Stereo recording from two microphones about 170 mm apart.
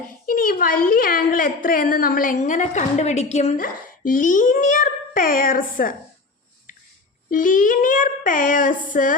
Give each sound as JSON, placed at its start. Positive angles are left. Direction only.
{"t": 0.3, "sound": "a woman's voice", "side_deg": 55}
{"t": 3.6, "sound": "a child's voice", "side_deg": 55}
{"t": 7.3, "sound": "a child's voice", "side_deg": 50}